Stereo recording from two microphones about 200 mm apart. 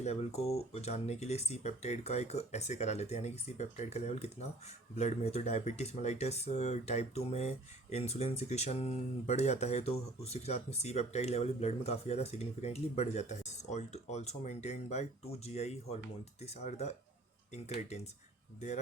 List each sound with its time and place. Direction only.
0.0 s speech: 35° left (ahead or behind)